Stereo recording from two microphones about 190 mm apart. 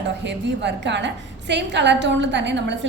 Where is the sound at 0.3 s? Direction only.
65° right (ahead or behind).